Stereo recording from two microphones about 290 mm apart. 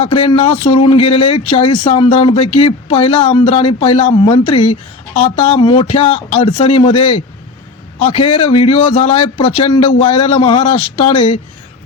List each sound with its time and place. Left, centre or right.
0.0 s a man's voice: centre
8.1 s a man's voice: centre